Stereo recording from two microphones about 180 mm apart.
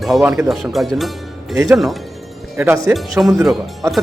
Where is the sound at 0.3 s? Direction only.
15° right (ahead or behind).